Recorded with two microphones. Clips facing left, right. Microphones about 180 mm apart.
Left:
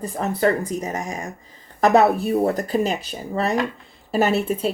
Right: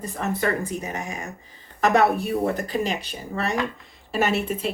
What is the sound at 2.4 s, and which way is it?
Speech, 35° left (ahead or behind).